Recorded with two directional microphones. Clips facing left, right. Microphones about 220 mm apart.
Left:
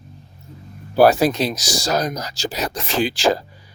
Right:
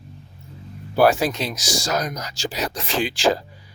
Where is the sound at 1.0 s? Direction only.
40° left (ahead or behind).